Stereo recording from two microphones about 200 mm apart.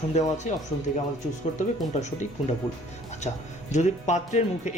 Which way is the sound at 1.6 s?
40° left (ahead or behind).